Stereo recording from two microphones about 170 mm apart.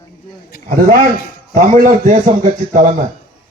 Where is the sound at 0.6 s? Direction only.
55° right (ahead or behind).